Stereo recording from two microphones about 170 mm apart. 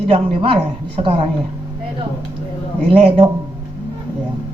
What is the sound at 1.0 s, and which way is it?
Speech, 30° right (ahead or behind).